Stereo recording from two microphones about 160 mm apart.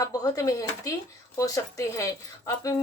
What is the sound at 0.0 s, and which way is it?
Speech, 25° left (ahead or behind).